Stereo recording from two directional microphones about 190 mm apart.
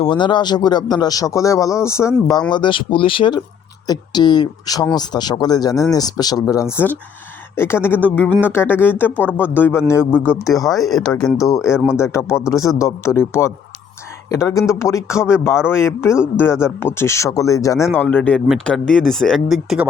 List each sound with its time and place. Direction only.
0.0 s speech: 25° left (ahead or behind); by 11.2 s centre (ahead or behind)
11.3 s speech: 15° left (ahead or behind); by 19.8 s centre (ahead or behind)